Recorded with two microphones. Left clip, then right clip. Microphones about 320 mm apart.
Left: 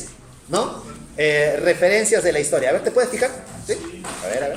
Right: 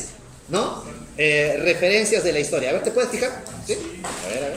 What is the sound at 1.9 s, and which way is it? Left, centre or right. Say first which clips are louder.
Speech: left 2 dB; left.